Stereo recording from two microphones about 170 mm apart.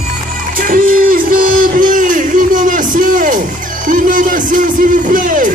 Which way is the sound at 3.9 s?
50° right (ahead or behind).